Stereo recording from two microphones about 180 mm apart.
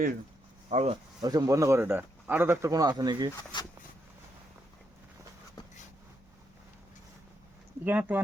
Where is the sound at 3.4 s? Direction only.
25° left (ahead or behind).